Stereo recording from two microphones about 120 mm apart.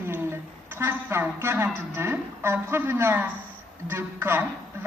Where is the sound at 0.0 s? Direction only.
15° right (ahead or behind).